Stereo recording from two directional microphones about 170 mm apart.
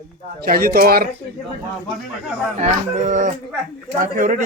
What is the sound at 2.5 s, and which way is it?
Speech, 45° right (ahead or behind).